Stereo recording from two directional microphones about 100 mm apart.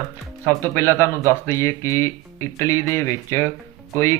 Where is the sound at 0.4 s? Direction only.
25° left (ahead or behind).